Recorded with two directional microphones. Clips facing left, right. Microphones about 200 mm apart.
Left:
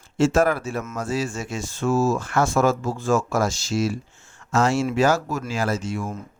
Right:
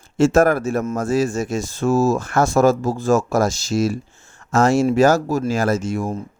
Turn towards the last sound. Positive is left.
turn(degrees=-45)  # may be behind; listen again after turning